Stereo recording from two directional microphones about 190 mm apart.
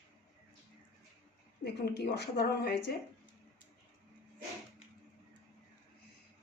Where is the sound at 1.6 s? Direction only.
60° left (ahead or behind).